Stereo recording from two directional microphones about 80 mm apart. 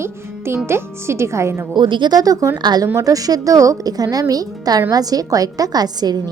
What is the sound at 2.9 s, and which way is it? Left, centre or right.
A woman's voice, right.